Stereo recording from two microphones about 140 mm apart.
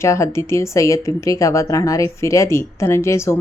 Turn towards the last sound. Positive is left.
turn(degrees=20)  # may be behind; listen again after turning